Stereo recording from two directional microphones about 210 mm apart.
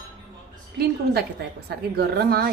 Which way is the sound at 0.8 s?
50° right (ahead or behind).